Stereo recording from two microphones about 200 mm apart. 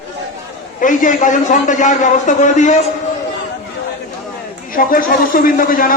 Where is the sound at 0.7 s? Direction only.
40° left (ahead or behind).